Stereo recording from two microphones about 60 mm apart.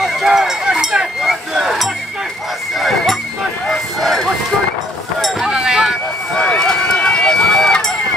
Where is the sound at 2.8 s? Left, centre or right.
Centre.